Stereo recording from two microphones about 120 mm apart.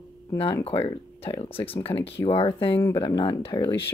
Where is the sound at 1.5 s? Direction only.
50° left (ahead or behind).